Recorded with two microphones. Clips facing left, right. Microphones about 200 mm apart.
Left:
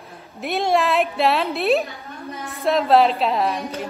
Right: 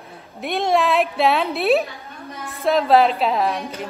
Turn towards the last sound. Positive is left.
turn(degrees=0)  # may be behind; listen again after turning